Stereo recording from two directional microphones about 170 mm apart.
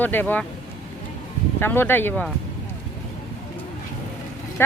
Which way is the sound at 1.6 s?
15° left (ahead or behind).